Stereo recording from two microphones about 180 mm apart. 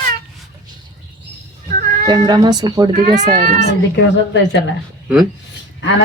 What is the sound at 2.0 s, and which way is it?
Speech, 25° right (ahead or behind).